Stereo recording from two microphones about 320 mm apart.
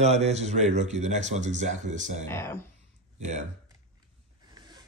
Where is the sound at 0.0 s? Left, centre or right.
Right.